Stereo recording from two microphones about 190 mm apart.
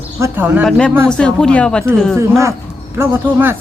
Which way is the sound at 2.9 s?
10° right (ahead or behind).